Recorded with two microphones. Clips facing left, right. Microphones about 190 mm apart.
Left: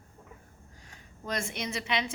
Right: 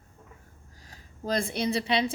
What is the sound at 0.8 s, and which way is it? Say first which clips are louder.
Speech: right 6 dB; 35° right (ahead or behind).